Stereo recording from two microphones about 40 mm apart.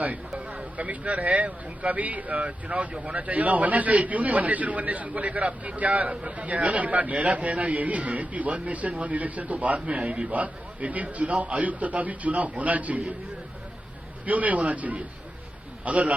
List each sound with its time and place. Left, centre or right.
0.3 s speech: right
14.3 s speech: right